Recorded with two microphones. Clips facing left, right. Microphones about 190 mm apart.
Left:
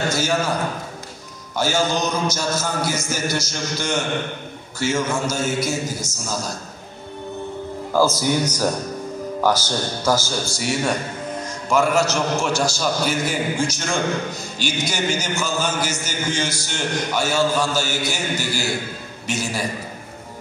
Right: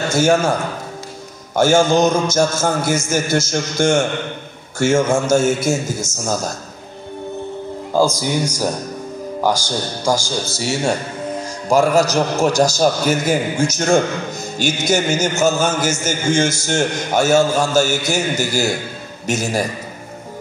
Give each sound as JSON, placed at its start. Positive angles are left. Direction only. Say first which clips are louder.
{"t": 0.1, "sound": "a man's voice", "louder": "right 6 dB", "side_deg": -50}
{"t": 7.9, "sound": "speech", "louder": "right 2 dB", "side_deg": -15}
{"t": 10.6, "sound": "a man's voice", "louder": "right 3 dB", "side_deg": -25}